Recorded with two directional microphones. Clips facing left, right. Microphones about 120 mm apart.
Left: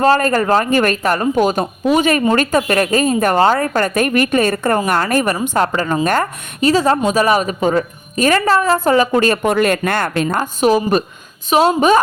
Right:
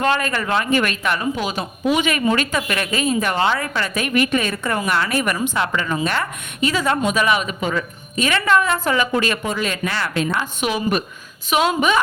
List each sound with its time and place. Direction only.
0.0 s a woman's voice: 40° left (ahead or behind)
9.4 s a woman's voice: 60° left (ahead or behind); by 11.9 s 35° left (ahead or behind)